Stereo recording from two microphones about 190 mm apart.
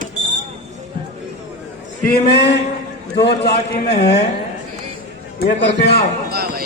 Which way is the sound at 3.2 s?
60° left (ahead or behind).